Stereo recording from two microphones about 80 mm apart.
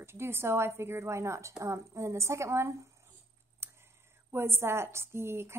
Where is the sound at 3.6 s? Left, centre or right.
Right.